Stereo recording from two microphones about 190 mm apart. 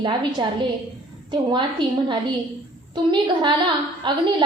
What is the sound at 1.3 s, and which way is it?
A woman's voice, 25° right (ahead or behind).